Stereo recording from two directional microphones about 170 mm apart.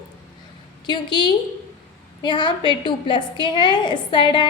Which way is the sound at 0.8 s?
25° left (ahead or behind).